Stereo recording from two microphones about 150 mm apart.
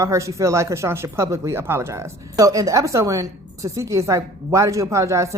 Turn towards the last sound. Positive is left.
turn(degrees=-20)  # may be behind; listen again after turning